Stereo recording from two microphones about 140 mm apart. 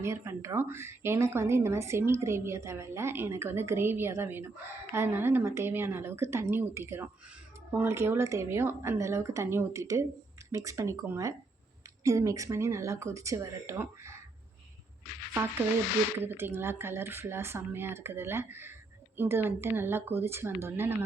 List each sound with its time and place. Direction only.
0.0 s a woman's voice: 20° right (ahead or behind)
16.1 s speech: 15° right (ahead or behind)